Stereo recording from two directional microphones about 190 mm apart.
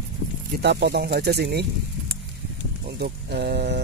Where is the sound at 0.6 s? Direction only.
60° right (ahead or behind).